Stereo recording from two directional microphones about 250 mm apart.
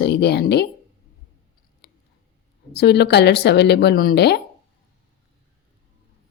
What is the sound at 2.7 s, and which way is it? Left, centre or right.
A woman's voice, left.